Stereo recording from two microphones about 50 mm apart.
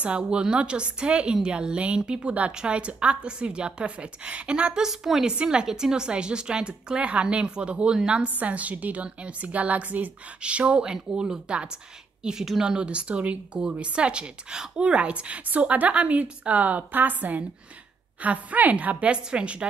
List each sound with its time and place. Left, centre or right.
0.0 s a woman's voice: right
4.8 s a woman's voice: centre
8.4 s a woman's voice: right